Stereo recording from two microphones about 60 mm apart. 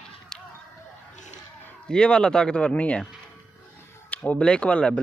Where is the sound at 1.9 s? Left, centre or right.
Centre.